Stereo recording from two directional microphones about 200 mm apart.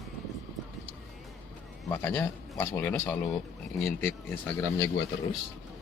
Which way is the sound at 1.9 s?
10° left (ahead or behind).